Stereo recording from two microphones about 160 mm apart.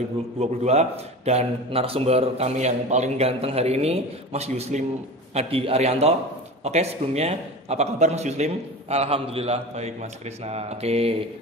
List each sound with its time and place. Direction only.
0.4 s speech: 40° right (ahead or behind)